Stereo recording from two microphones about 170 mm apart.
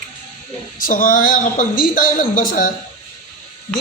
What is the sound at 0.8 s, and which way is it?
Speech, 50° left (ahead or behind).